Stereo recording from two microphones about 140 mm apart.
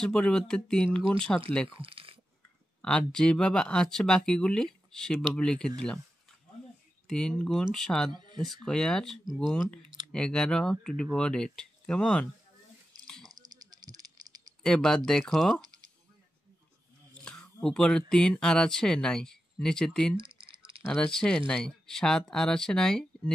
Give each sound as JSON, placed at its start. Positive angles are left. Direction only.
{"t": 0.0, "sound": "speech", "side_deg": 5}
{"t": 1.8, "sound": "speech", "side_deg": -40}
{"t": 2.8, "sound": "speech", "side_deg": 5}
{"t": 7.1, "sound": "speech", "side_deg": 5}
{"t": 8.1, "sound": "speech", "side_deg": -30}
{"t": 8.4, "sound": "speech", "side_deg": 0}
{"t": 13.0, "sound": "a sound", "side_deg": 5}
{"t": 13.3, "sound": "a sound", "side_deg": -30}
{"t": 14.6, "sound": "speech", "side_deg": 5}
{"t": 15.6, "sound": "a sound", "side_deg": -30}
{"t": 17.2, "sound": "a sound", "side_deg": 5}
{"t": 17.6, "sound": "speech", "side_deg": 5}
{"t": 20.2, "sound": "typing", "side_deg": -40}
{"t": 20.9, "sound": "speech", "side_deg": 5}